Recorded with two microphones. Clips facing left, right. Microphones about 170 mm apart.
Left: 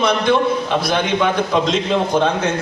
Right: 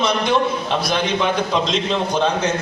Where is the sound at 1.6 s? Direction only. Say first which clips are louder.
Left 3 dB; 55° left (ahead or behind).